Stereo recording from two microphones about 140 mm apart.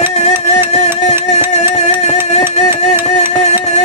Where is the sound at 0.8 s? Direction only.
55° left (ahead or behind).